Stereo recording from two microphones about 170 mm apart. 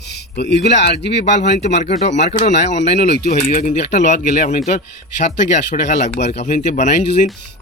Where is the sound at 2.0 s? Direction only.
40° left (ahead or behind).